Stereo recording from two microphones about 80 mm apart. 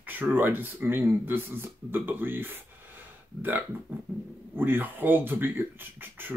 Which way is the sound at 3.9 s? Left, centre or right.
Right.